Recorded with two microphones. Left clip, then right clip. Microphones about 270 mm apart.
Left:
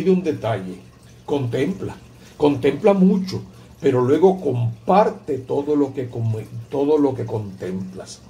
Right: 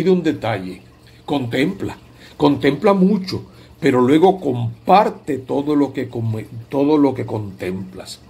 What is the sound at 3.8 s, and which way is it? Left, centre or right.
Speech, right.